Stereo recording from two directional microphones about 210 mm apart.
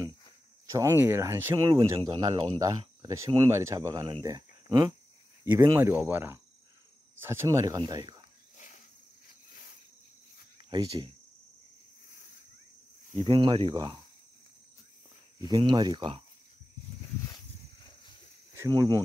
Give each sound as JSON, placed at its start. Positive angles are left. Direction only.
{"t": 0.7, "sound": "speech", "side_deg": -15}
{"t": 2.6, "sound": "speech", "side_deg": -15}
{"t": 8.5, "sound": "a sound", "side_deg": 35}
{"t": 13.3, "sound": "speech", "side_deg": -20}
{"t": 15.5, "sound": "speech", "side_deg": -20}
{"t": 18.5, "sound": "speech", "side_deg": -15}